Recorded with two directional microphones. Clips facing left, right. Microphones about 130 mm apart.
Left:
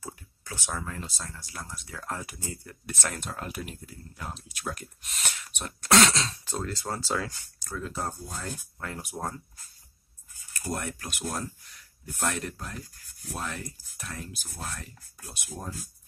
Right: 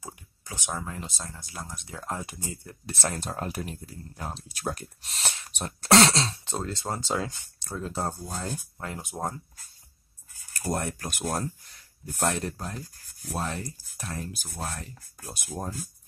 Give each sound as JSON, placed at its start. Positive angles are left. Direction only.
{"t": 0.0, "sound": "speech", "side_deg": -15}
{"t": 10.6, "sound": "speech", "side_deg": -35}
{"t": 12.3, "sound": "speech", "side_deg": -30}